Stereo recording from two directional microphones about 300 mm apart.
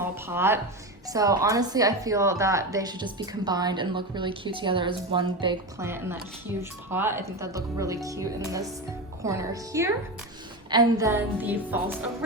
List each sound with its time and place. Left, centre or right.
0.0 s a woman's voice: centre